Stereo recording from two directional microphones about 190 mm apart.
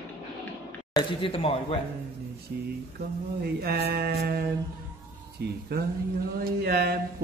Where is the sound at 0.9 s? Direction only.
30° left (ahead or behind).